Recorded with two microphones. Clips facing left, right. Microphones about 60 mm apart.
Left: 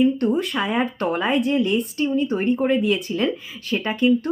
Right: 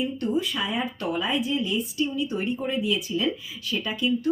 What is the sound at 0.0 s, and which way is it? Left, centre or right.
Speech, left.